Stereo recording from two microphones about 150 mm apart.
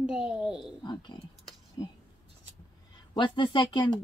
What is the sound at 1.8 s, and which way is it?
Speech, 25° left (ahead or behind).